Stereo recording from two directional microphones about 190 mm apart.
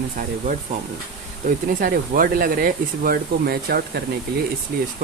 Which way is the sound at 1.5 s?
45° right (ahead or behind).